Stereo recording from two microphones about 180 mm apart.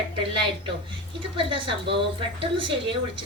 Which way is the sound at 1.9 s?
30° right (ahead or behind).